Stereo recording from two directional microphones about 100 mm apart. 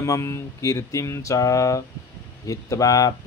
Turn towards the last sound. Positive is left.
turn(degrees=35)  # may be behind; listen again after turning